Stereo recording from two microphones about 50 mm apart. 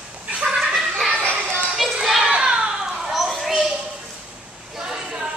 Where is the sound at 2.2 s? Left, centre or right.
Centre.